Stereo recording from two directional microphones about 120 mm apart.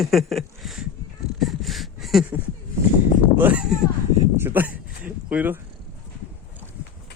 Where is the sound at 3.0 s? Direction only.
15° right (ahead or behind).